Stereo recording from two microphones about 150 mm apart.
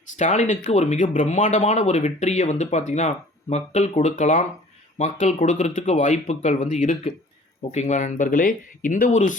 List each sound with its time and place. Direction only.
0.2 s speech: 50° left (ahead or behind)